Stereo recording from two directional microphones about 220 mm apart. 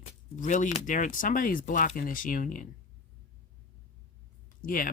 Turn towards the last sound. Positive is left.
turn(degrees=40)  # may be behind; listen again after turning